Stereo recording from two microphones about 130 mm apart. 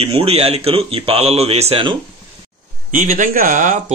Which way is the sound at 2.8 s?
85° right.